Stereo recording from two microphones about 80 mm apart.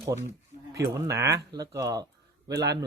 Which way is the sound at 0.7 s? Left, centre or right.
Right.